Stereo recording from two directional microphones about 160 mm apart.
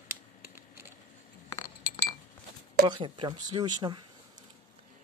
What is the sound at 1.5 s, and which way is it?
Chink, 25° left (ahead or behind).